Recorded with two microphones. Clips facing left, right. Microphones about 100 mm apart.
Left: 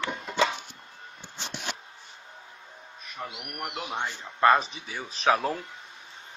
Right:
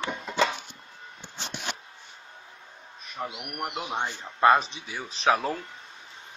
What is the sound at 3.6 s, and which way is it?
Speech, 20° right (ahead or behind).